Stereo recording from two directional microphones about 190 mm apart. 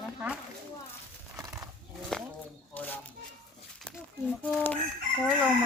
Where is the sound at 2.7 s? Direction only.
10° left (ahead or behind).